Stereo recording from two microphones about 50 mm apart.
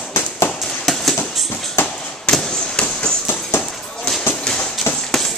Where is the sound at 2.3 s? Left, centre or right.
Centre.